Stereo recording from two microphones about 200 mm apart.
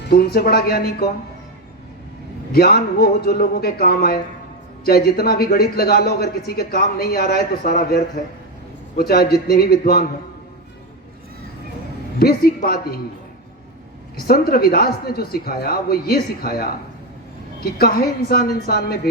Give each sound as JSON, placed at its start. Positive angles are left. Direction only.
{"t": 0.0, "sound": "a man's voice", "side_deg": 50}
{"t": 2.5, "sound": "a man's voice", "side_deg": 50}
{"t": 12.2, "sound": "a man's voice", "side_deg": 50}
{"t": 14.3, "sound": "a man's voice", "side_deg": 50}